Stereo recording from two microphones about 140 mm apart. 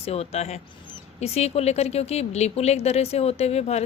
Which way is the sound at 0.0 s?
45° left (ahead or behind).